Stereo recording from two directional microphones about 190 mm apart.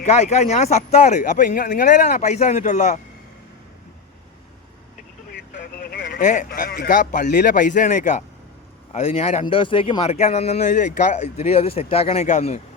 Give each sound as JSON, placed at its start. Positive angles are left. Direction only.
{"t": 0.0, "sound": "speech", "side_deg": 35}
{"t": 5.8, "sound": "speech", "side_deg": 50}